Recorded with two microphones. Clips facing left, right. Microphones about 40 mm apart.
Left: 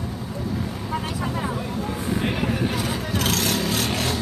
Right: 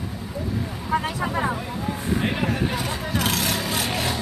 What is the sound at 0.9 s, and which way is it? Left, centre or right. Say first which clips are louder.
Vehicle: right 5 dB; centre.